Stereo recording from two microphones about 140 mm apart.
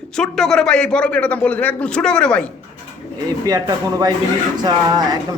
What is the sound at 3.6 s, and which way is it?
Speech, 30° right (ahead or behind).